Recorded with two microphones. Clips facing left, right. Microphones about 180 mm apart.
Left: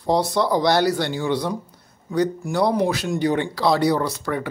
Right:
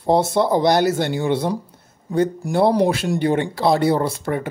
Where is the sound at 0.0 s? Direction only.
25° right (ahead or behind).